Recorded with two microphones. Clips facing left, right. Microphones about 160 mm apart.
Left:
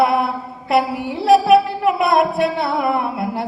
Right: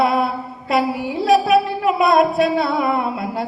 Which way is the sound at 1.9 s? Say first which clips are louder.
Right 1 dB; 60° left (ahead or behind).